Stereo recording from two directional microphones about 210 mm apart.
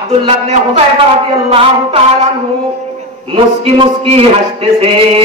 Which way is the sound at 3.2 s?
25° right (ahead or behind).